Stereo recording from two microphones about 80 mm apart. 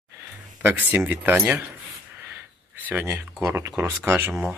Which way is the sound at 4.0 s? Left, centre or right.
Right.